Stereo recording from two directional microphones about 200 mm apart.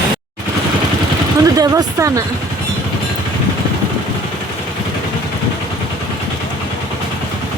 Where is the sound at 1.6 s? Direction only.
15° right (ahead or behind).